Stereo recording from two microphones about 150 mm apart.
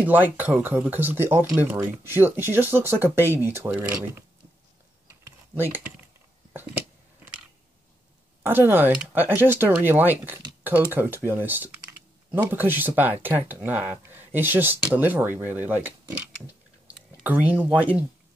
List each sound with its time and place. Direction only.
0.0 s speech: 10° right (ahead or behind)
5.2 s typing: 15° right (ahead or behind)
8.4 s speech: 15° right (ahead or behind)